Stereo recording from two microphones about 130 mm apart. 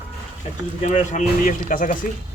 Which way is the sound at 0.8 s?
65° left (ahead or behind).